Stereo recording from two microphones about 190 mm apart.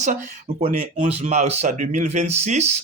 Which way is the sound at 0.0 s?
35° right (ahead or behind).